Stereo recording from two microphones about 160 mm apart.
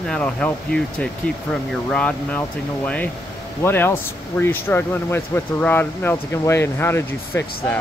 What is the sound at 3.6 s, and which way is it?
Speech, 15° left (ahead or behind).